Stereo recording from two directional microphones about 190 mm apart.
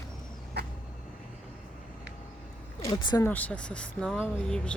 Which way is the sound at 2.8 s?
25° left (ahead or behind).